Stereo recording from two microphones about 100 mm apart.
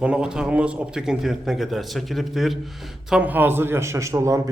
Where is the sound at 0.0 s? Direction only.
10° right (ahead or behind).